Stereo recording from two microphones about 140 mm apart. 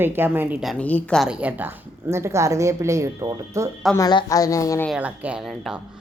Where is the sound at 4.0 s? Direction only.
25° left (ahead or behind).